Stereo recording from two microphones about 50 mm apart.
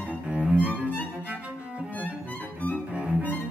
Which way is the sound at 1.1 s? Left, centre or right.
Right.